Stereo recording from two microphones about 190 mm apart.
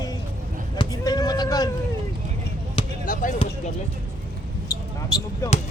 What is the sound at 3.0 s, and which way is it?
Basketball bounce, 45° left (ahead or behind).